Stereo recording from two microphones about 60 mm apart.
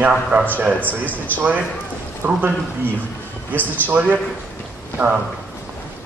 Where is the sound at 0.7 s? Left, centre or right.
Left.